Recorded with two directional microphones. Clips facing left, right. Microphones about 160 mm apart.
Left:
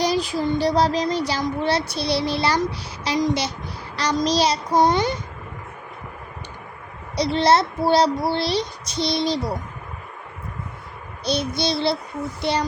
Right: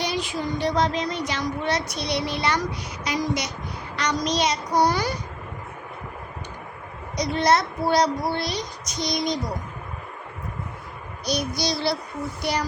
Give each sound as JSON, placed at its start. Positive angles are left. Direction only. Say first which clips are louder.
{"t": 0.0, "sound": "child singing", "louder": "left 6 dB", "side_deg": 35}
{"t": 7.2, "sound": "child singing", "louder": "left 3 dB", "side_deg": 30}
{"t": 11.3, "sound": "child singing", "louder": "left 3 dB", "side_deg": 25}